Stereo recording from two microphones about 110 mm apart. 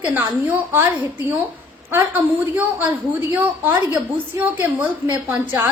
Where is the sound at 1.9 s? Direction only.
15° right (ahead or behind).